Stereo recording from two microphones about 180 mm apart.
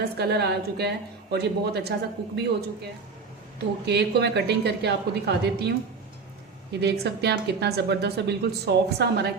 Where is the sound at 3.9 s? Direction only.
65° right (ahead or behind).